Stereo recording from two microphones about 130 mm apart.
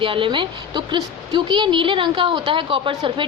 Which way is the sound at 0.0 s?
40° right (ahead or behind).